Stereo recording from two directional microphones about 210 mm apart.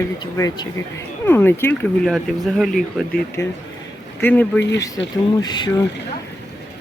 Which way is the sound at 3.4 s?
15° left (ahead or behind).